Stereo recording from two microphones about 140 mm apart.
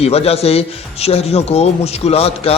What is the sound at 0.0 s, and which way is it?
A man's voice, 45° left (ahead or behind).